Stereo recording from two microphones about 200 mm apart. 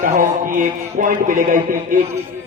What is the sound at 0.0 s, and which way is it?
A man's voice, 40° right (ahead or behind).